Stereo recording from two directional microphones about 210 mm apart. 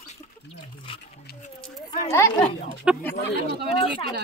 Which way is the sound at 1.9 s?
15° left (ahead or behind).